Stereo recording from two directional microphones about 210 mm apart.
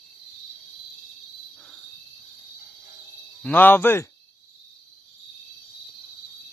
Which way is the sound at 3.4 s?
10° left (ahead or behind).